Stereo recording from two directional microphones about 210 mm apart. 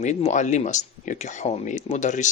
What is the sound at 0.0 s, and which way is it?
Speech, 35° left (ahead or behind).